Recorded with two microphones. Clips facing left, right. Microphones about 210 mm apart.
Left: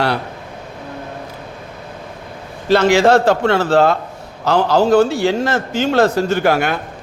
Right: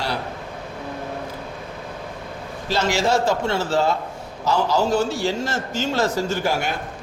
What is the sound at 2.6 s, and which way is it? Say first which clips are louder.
Speech: left 9 dB; 60° left (ahead or behind).